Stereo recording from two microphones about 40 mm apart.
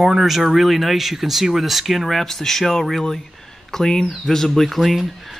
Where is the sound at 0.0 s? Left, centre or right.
Centre.